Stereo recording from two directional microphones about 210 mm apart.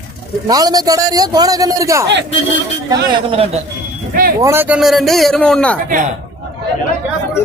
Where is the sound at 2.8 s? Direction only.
25° right (ahead or behind).